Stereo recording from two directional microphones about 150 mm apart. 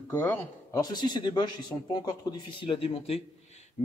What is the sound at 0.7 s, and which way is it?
Speech, 25° left (ahead or behind).